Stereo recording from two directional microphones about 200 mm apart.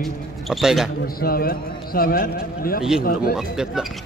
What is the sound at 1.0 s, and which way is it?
A man's voice, 50° left (ahead or behind).